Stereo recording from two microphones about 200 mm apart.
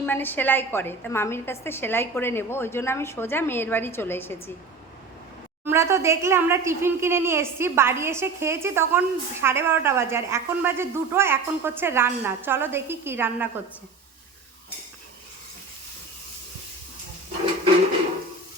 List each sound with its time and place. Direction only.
0.0 s a woman's voice: 10° left (ahead or behind)
5.6 s speech: 15° right (ahead or behind)